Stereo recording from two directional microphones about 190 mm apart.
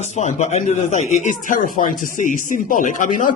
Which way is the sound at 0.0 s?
35° left (ahead or behind).